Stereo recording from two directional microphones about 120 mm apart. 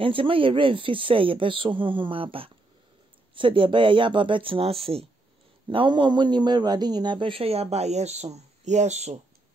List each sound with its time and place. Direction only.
0.0 s speech: 50° right (ahead or behind)
5.7 s speech: 45° right (ahead or behind); by 9.2 s 70° right (ahead or behind)